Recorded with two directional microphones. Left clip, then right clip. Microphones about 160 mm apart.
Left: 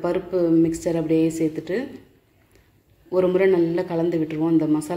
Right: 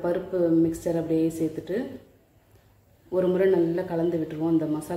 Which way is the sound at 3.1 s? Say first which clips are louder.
Left 4 dB; 20° left (ahead or behind).